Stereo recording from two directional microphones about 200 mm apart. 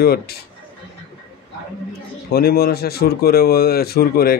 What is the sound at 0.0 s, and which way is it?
Speech, 50° left (ahead or behind).